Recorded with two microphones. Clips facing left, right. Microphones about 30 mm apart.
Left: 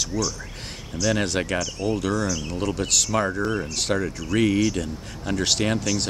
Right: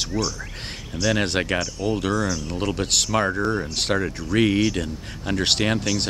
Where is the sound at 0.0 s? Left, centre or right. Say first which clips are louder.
Right 1 dB; right; by 3.6 s centre.